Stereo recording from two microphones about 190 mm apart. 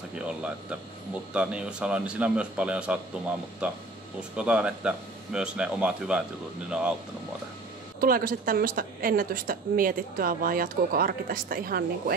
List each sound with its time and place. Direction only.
0.1 s a man's voice: 5° right (ahead or behind)
8.0 s speech: 50° right (ahead or behind)